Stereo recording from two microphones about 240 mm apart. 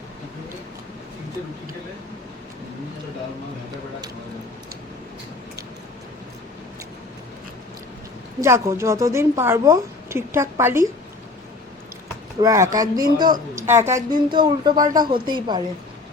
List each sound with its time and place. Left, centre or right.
8.4 s a woman's voice: centre
12.4 s a woman's voice: centre